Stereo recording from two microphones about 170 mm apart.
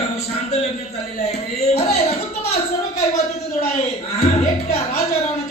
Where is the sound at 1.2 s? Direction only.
40° left (ahead or behind).